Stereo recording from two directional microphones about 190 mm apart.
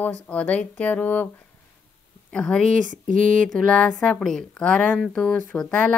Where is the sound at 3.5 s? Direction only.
5° left (ahead or behind).